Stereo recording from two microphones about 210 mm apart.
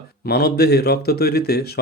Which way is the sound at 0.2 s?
50° left (ahead or behind).